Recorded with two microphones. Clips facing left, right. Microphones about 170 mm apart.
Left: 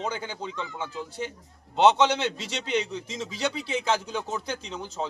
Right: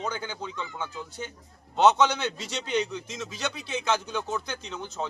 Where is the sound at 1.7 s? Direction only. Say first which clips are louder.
Left 1 dB; 30° left (ahead or behind).